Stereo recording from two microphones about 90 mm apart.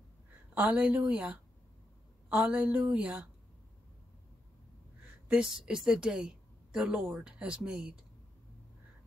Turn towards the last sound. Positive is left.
turn(degrees=-10)  # may be behind; listen again after turning